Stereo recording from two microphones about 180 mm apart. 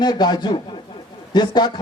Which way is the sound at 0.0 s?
25° left (ahead or behind).